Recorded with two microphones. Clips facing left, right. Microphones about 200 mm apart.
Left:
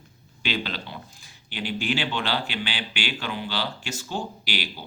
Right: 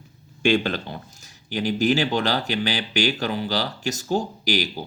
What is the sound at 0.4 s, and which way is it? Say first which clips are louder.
Speech: right 9 dB; 45° right (ahead or behind).